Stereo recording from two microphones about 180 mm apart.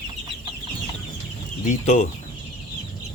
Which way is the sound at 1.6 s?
40° left (ahead or behind).